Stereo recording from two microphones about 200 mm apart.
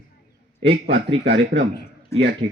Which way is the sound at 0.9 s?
60° right (ahead or behind).